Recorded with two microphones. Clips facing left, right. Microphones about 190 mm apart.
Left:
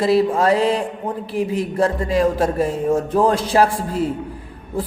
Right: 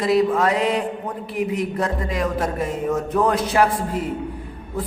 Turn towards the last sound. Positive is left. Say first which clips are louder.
# left 2 dB
turn(degrees=30)  # may be behind; listen again after turning